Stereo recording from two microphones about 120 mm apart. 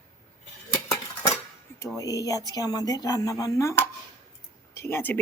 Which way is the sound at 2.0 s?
30° left (ahead or behind).